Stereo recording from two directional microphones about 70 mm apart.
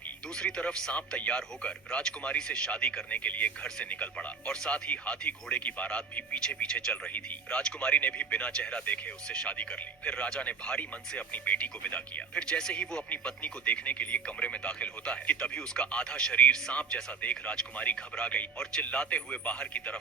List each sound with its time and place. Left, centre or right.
0.3 s speech: centre
12.3 s speech: centre